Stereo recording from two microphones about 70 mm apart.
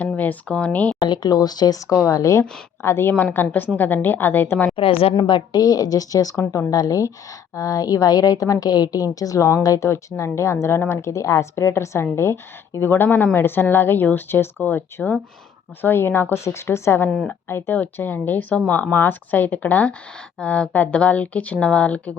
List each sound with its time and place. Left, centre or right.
0.2 s speech: centre
1.0 s speech: left
2.0 s speech: left
2.8 s a woman's voice: left
5.1 s a woman's voice: left; by 22.2 s centre